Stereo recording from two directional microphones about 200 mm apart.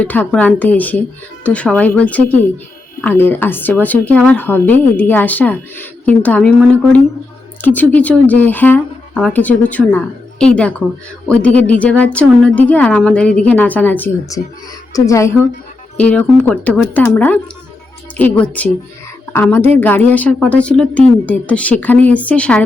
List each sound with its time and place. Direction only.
0.0 s speech: 5° left (ahead or behind)